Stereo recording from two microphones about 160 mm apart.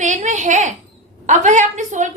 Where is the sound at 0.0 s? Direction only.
50° right (ahead or behind).